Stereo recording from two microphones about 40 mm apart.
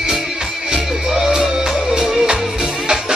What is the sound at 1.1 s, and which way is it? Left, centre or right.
Music, centre.